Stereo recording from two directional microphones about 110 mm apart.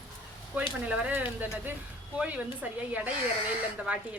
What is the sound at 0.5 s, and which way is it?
A woman's voice, 10° right (ahead or behind).